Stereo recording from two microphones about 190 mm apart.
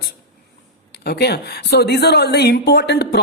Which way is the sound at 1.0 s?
60° left (ahead or behind).